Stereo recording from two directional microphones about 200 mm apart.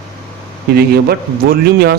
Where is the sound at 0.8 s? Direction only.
50° right (ahead or behind).